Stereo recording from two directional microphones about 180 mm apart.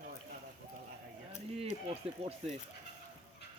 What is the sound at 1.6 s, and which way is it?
Speech, 35° right (ahead or behind).